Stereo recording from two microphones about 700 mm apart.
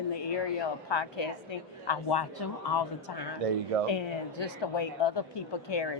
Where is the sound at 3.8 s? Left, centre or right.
Left.